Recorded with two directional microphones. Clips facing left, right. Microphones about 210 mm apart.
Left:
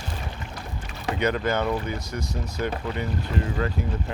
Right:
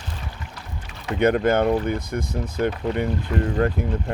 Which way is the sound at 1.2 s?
50° right (ahead or behind).